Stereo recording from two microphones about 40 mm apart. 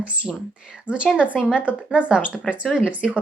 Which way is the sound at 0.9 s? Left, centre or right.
Right.